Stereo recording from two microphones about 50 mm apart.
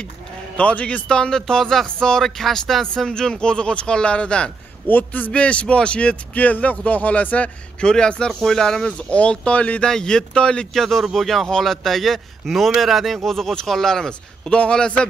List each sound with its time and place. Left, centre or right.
0.6 s speech: left
4.8 s a man's voice: left
5.3 s speech: left
9.8 s speech: centre
10.7 s a man's voice: centre; by 15.0 s left